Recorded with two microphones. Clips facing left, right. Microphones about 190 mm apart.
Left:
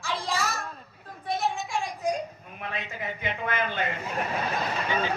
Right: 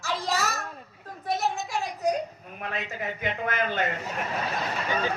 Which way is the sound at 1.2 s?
40° right (ahead or behind).